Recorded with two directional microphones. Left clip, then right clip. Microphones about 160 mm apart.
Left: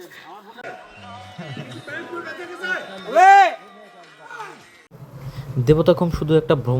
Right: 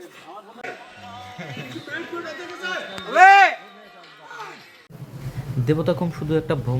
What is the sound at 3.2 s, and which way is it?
Speech, 15° left (ahead or behind).